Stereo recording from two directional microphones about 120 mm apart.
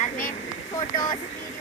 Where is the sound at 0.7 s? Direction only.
35° left (ahead or behind).